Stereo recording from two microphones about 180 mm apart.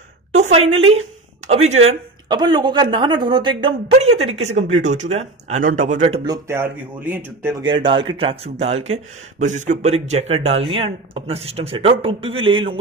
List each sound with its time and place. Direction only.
0.3 s a woman's voice: 40° right (ahead or behind)
1.9 s speech: 25° right (ahead or behind)
6.2 s speech: 20° right (ahead or behind)
7.5 s speech: 25° right (ahead or behind)